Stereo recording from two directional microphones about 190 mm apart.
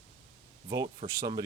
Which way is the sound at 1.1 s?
20° right (ahead or behind).